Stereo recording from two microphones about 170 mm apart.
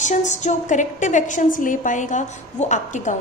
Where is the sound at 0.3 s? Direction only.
45° left (ahead or behind).